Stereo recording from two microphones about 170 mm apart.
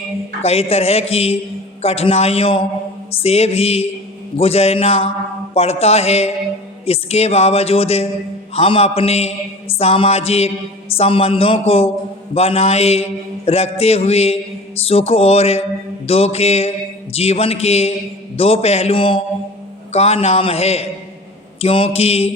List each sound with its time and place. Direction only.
0.4 s mantra: 35° left (ahead or behind)